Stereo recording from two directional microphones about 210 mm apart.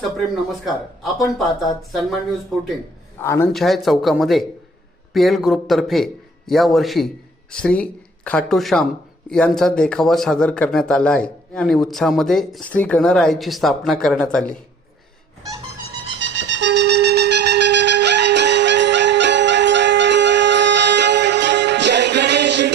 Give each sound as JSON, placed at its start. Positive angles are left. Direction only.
{"t": 0.4, "sound": "a man's voice", "side_deg": 0}
{"t": 3.2, "sound": "speech", "side_deg": 10}
{"t": 3.5, "sound": "a man's voice", "side_deg": 0}
{"t": 16.1, "sound": "shofar", "side_deg": -60}